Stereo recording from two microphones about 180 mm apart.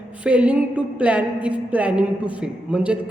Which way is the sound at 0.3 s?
5° right (ahead or behind).